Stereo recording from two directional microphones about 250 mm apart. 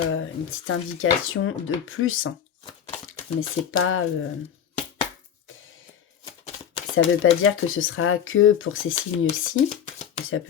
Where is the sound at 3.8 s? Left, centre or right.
Left.